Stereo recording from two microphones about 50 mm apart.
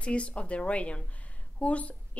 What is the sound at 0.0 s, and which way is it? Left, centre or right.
A woman's voice, left.